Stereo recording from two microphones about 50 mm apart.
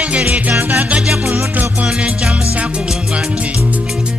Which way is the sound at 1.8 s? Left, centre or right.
Right.